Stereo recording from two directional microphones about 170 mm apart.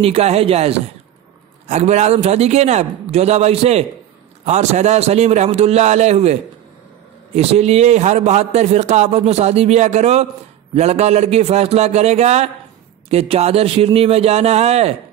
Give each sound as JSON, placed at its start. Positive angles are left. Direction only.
{"t": 0.0, "sound": "a man's voice", "side_deg": -35}
{"t": 7.3, "sound": "a man's voice", "side_deg": -40}